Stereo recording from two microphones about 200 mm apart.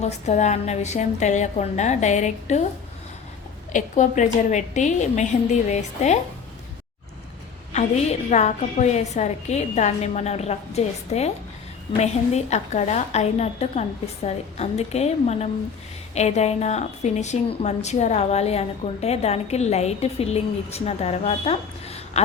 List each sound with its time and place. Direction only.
0.0 s a woman's voice: 35° left (ahead or behind)
3.7 s a woman's voice: 40° left (ahead or behind)
7.7 s a woman's voice: 35° left (ahead or behind)